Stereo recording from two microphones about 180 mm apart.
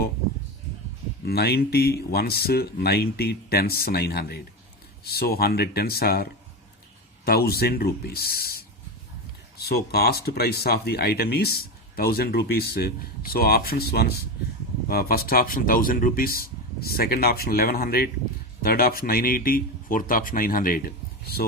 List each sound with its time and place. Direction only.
1.2 s speech: 60° left (ahead or behind)
7.3 s speech: 60° left (ahead or behind)